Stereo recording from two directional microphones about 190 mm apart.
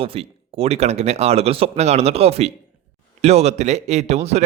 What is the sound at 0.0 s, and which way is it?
A man's voice, 30° right (ahead or behind).